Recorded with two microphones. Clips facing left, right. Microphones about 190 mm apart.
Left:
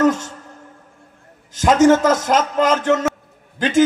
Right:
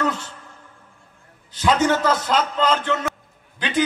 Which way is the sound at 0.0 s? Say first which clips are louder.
Left 8 dB; 45° left (ahead or behind).